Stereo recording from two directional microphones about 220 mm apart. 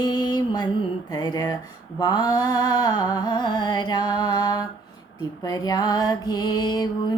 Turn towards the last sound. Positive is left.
turn(degrees=20)  # may be behind; listen again after turning